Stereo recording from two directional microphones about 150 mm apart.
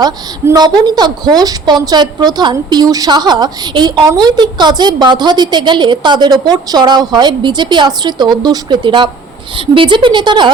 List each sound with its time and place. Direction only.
0.0 s a woman's voice: 25° right (ahead or behind)